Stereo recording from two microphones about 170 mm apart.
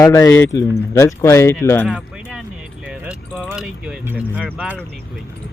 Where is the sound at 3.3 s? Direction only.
Centre (ahead or behind).